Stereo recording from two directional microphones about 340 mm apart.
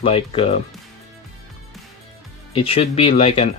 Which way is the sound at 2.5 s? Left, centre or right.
Centre.